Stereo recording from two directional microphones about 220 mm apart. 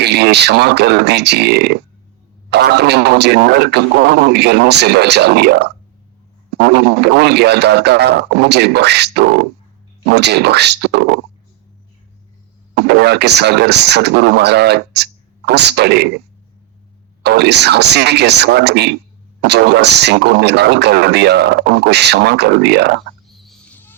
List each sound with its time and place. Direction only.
0.0 s speech: 50° right (ahead or behind)
12.7 s speech: 50° right (ahead or behind)
17.2 s speech: 50° right (ahead or behind)
23.3 s fowl: centre (ahead or behind)